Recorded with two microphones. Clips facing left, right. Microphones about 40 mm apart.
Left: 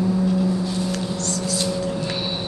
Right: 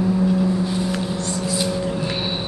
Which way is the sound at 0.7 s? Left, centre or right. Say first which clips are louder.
Right 2 dB; centre.